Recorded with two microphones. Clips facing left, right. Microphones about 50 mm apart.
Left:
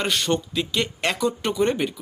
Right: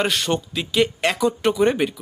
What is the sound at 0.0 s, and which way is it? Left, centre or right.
Speech, centre.